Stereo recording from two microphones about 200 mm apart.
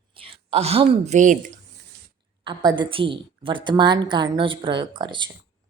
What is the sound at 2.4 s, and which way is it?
A woman's voice, 20° right (ahead or behind).